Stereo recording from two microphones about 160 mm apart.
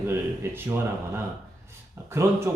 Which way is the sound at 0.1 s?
15° right (ahead or behind).